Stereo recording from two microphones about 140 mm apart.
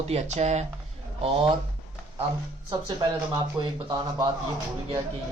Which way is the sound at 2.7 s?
35° right (ahead or behind).